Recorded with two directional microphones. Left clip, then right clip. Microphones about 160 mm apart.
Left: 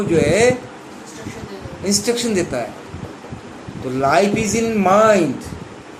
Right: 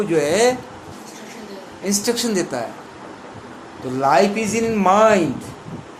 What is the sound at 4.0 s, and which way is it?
Speech, 35° right (ahead or behind).